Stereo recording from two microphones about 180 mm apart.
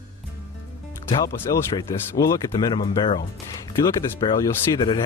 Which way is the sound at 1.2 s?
15° left (ahead or behind).